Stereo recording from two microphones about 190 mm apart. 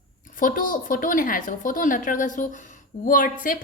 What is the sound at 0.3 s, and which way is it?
A woman's voice, 45° left (ahead or behind).